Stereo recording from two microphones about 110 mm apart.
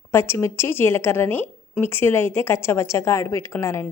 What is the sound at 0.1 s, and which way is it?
A woman's voice, 25° left (ahead or behind).